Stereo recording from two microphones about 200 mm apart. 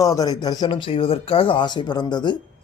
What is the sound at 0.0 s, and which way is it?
Speech, 20° left (ahead or behind).